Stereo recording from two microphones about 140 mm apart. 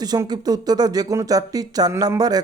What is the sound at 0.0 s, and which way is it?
Speech, 30° right (ahead or behind).